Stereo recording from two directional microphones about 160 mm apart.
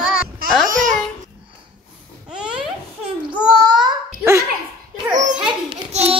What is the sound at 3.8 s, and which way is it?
Babbling, 15° right (ahead or behind).